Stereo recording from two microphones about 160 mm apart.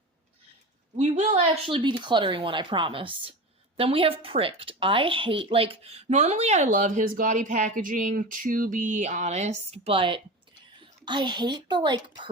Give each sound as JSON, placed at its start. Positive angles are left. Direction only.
{"t": 0.9, "sound": "a woman's voice", "side_deg": -45}